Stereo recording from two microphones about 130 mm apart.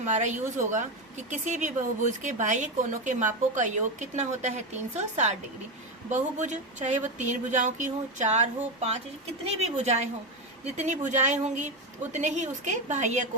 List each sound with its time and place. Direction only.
0.0 s a woman's voice: 65° right (ahead or behind)